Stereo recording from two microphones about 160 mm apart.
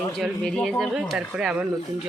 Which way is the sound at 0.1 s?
5° left (ahead or behind).